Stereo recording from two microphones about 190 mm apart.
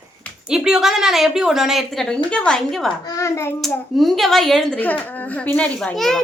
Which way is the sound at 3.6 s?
Centre (ahead or behind).